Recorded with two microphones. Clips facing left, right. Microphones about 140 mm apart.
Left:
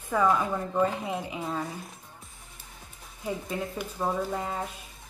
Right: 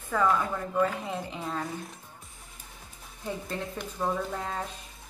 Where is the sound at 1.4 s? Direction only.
5° left (ahead or behind).